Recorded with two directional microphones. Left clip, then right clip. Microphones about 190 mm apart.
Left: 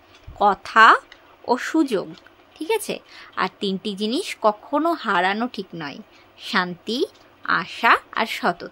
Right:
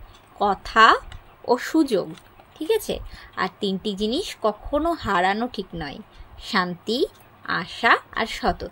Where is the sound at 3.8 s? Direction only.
40° left (ahead or behind).